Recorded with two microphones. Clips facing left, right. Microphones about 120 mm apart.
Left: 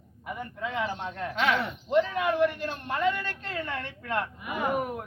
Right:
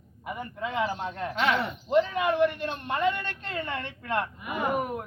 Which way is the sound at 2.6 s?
25° right (ahead or behind).